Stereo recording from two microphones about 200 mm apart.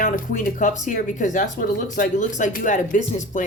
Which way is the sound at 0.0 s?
40° left (ahead or behind).